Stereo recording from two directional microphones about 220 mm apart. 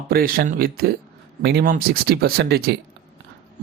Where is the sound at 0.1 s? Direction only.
40° right (ahead or behind).